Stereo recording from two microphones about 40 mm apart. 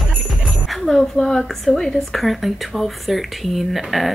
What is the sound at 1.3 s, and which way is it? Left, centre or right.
Speech, centre.